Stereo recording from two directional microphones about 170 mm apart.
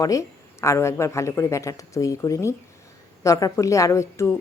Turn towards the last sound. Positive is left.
turn(degrees=15)  # may be behind; listen again after turning